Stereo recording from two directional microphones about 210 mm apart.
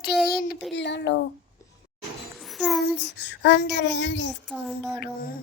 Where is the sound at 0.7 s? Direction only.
55° left (ahead or behind).